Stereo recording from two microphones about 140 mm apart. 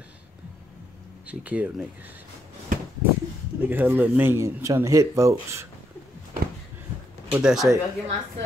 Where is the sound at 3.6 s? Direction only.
15° right (ahead or behind).